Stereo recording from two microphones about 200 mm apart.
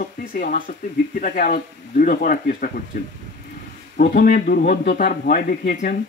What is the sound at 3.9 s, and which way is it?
A man's voice, 45° left (ahead or behind).